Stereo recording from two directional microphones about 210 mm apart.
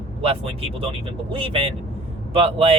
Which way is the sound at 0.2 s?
25° right (ahead or behind).